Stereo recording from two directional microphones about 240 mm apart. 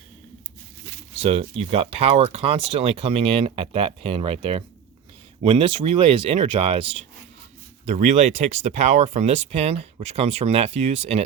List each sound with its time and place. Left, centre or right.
1.2 s speech: right